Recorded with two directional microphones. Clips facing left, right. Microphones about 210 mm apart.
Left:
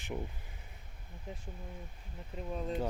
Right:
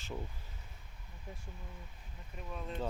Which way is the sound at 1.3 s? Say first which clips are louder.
Left 4 dB; 20° left (ahead or behind).